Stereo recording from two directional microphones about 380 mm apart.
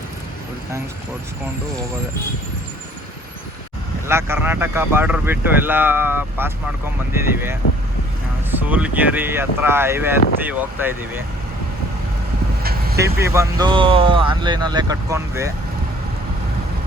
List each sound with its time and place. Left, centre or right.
4.0 s speech: centre
13.0 s speech: centre